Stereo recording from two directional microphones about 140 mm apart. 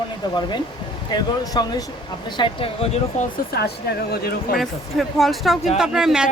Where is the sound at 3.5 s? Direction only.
90° left.